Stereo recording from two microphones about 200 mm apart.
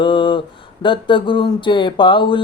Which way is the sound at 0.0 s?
25° left (ahead or behind).